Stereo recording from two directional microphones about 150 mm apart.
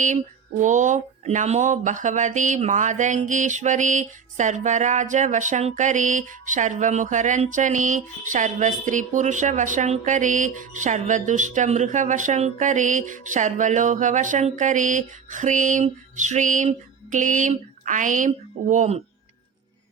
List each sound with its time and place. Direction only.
0.6 s speech: 55° right (ahead or behind)